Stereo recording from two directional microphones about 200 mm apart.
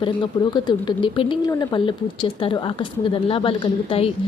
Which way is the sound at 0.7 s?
25° left (ahead or behind).